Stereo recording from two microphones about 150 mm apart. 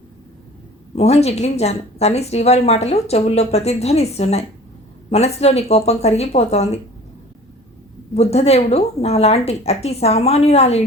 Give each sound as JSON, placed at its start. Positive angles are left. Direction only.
{"t": 0.9, "sound": "a woman's voice", "side_deg": 45}
{"t": 8.1, "sound": "a woman's voice", "side_deg": 45}